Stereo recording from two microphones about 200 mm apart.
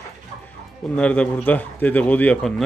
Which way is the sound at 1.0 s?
5° left (ahead or behind).